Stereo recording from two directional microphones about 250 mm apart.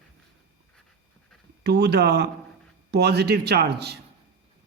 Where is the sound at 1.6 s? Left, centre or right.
Right.